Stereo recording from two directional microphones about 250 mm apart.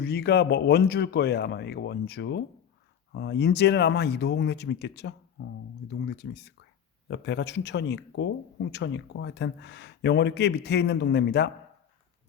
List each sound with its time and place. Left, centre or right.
0.0 s speech: left